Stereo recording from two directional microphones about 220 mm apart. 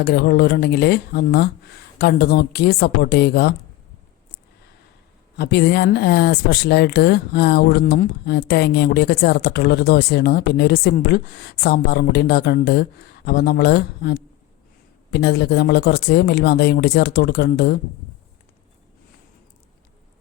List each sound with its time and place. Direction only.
0.0 s speech: 45° left (ahead or behind)
5.4 s speech: 50° left (ahead or behind)